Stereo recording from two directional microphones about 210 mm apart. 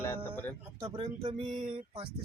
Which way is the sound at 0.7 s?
20° right (ahead or behind).